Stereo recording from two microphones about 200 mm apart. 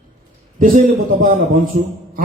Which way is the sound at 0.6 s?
40° right (ahead or behind).